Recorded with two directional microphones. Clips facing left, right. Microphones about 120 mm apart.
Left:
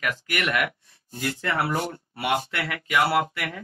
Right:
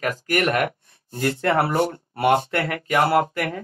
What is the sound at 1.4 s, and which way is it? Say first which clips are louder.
Speech: right 6 dB; 60° right (ahead or behind).